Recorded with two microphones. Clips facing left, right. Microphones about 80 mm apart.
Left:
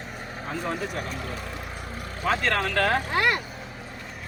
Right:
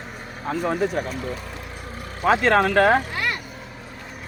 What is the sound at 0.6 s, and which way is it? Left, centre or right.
Speech, right.